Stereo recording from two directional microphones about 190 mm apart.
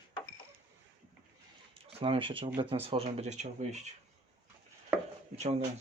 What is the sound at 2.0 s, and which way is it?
Speech, 30° right (ahead or behind).